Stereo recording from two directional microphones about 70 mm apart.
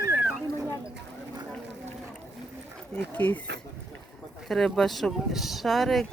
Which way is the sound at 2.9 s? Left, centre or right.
Left.